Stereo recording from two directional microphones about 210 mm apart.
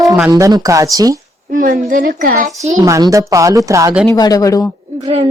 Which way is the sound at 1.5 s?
40° right (ahead or behind).